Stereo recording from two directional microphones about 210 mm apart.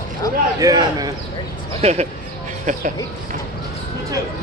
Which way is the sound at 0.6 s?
15° right (ahead or behind).